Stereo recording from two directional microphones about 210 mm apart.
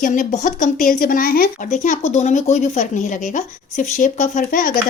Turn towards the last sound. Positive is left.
turn(degrees=40)  # may be behind; listen again after turning